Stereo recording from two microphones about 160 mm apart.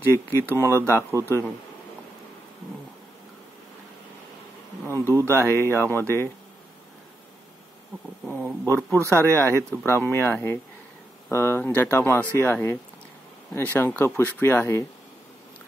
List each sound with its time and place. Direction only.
0.1 s speech: 15° right (ahead or behind)
4.8 s speech: 15° right (ahead or behind)
8.3 s speech: 10° right (ahead or behind)
8.6 s speech: 10° left (ahead or behind)